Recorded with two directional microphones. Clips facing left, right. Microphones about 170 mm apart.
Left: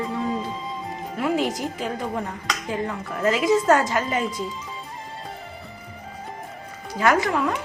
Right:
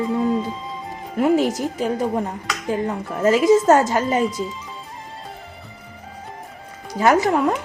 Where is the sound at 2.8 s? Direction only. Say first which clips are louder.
Right 4 dB; 35° right (ahead or behind).